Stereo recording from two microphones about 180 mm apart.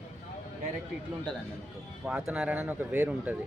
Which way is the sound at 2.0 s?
5° right (ahead or behind).